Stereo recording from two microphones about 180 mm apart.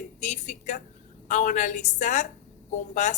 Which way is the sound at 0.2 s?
40° left (ahead or behind).